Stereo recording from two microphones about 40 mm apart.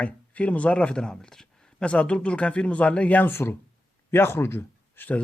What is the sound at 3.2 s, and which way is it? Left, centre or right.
Speech, left.